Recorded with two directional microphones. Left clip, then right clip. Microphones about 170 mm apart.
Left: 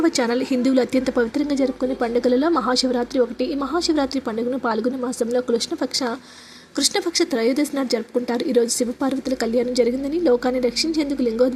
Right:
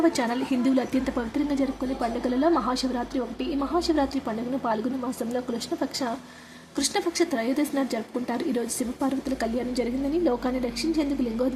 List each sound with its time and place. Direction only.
0.0 s a woman's voice: 20° left (ahead or behind)
5.3 s a woman's voice: 20° left (ahead or behind)